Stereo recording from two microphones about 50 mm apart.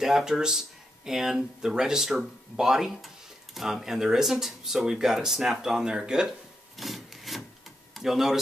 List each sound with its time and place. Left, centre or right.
0.0 s speech: centre
6.8 s wood: centre
7.9 s speech: centre